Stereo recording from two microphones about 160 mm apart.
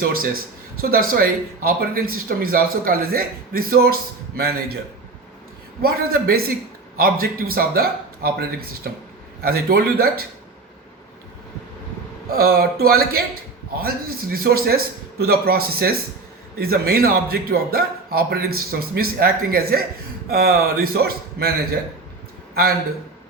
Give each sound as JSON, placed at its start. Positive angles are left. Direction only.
{"t": 0.0, "sound": "speech", "side_deg": -65}
{"t": 5.8, "sound": "speech", "side_deg": -70}
{"t": 12.3, "sound": "speech", "side_deg": -70}